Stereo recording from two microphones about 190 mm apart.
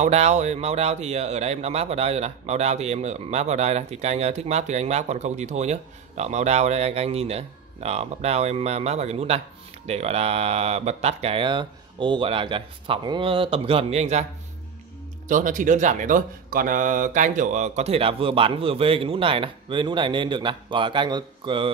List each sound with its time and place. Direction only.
0.0 s speech: 35° right (ahead or behind)
15.2 s speech: 45° right (ahead or behind); by 21.6 s 25° right (ahead or behind)